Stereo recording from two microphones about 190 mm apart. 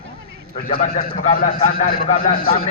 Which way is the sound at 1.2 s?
40° left (ahead or behind).